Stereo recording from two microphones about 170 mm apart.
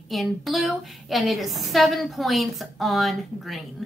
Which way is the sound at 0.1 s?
Centre (ahead or behind).